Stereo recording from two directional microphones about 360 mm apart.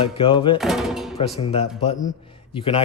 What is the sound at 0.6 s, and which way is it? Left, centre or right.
Speech, centre.